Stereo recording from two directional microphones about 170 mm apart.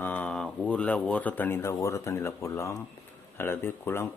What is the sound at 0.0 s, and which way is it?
Speech, 10° left (ahead or behind).